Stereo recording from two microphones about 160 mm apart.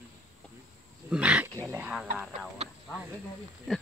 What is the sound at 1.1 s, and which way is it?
Dog, 10° right (ahead or behind).